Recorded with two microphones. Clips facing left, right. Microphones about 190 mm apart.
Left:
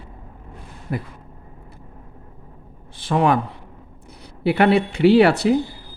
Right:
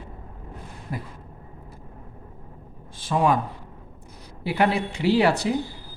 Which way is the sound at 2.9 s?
65° left (ahead or behind).